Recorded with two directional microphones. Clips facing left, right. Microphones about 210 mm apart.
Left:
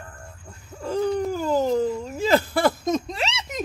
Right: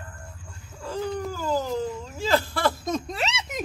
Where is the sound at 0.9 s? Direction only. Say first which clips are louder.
Left 6 dB; 20° left (ahead or behind).